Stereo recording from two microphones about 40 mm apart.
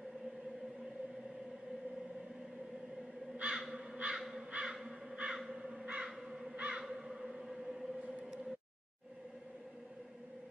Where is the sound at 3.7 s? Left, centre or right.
Right.